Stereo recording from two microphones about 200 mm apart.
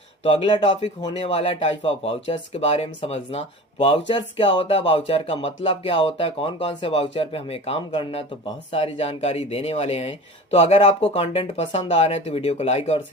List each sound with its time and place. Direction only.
0.3 s speech: 25° left (ahead or behind)